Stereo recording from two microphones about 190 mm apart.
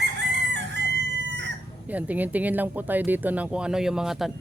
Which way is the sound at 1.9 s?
10° right (ahead or behind).